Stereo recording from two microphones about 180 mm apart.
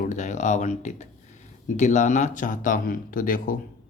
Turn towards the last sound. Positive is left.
turn(degrees=50)  # may be behind; listen again after turning